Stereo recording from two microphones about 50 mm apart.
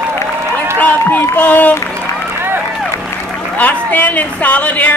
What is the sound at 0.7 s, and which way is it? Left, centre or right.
A man's voice, left.